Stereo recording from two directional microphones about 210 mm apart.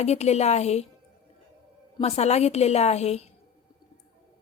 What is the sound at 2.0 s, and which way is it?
A woman's voice, 30° left (ahead or behind).